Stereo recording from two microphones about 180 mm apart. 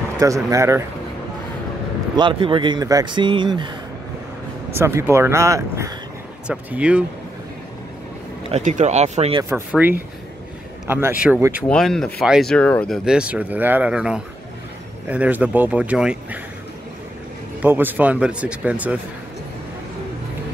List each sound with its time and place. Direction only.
0.2 s speech: 20° right (ahead or behind)
2.1 s speech: 25° right (ahead or behind)
4.7 s speech: 15° right (ahead or behind)
6.4 s speech: 5° right (ahead or behind)
8.5 s speech: 40° right (ahead or behind)
9.8 s speech: 10° right (ahead or behind)
11.7 s speech: 5° left (ahead or behind)
17.6 s speech: 10° right (ahead or behind)